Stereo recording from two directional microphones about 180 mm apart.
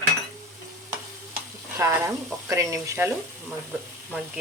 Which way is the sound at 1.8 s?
15° right (ahead or behind).